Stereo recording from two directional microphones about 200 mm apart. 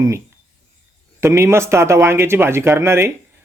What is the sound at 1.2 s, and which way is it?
Speech, 15° right (ahead or behind).